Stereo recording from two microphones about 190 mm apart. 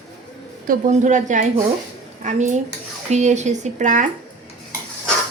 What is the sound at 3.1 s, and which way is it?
Speech, 35° right (ahead or behind).